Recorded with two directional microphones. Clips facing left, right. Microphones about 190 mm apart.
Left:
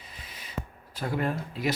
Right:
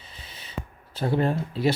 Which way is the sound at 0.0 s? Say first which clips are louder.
Right 1 dB; 30° right (ahead or behind).